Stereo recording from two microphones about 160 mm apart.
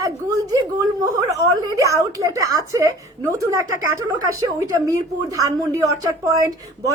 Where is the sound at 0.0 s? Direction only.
20° right (ahead or behind).